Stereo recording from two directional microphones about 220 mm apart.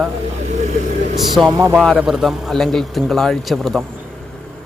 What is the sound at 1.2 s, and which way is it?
A man's voice, centre (ahead or behind).